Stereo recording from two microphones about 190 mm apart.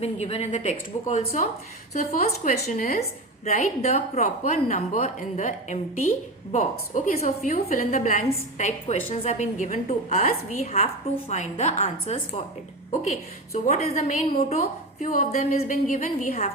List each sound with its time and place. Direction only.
0.0 s speech: 35° left (ahead or behind)